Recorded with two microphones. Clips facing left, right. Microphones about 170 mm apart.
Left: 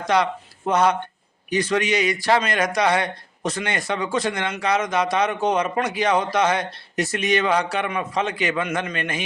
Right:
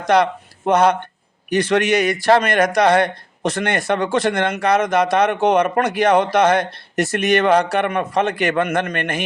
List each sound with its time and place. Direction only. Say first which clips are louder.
0.1 s speech: right 5 dB; 60° right (ahead or behind)